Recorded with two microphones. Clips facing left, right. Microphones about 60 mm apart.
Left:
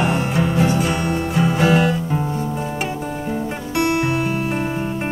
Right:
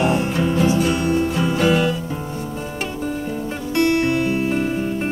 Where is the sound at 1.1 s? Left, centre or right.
Left.